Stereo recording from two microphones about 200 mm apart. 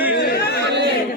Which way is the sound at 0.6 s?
60° right (ahead or behind).